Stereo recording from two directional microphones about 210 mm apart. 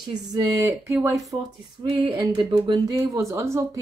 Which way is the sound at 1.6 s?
20° right (ahead or behind).